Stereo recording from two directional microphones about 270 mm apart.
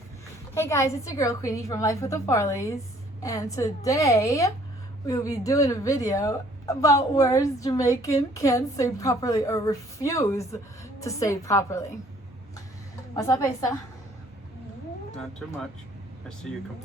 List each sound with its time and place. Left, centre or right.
0.5 s a woman's voice: centre
13.1 s a woman's voice: centre
15.4 s speech: centre